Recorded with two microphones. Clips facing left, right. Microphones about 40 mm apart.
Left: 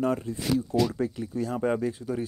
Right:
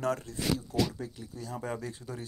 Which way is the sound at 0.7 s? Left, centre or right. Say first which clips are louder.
Left 6 dB; left.